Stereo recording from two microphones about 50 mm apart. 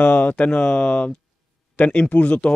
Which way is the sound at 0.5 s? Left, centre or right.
Centre.